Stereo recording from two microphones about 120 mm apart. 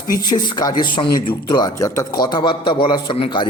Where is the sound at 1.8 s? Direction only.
25° left (ahead or behind); by 3.5 s 45° left (ahead or behind).